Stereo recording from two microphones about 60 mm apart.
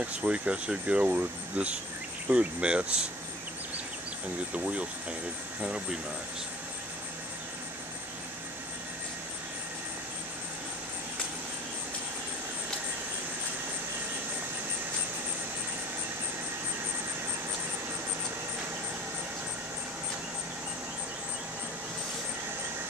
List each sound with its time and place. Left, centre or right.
0.0 s speech: right
5.6 s speech: centre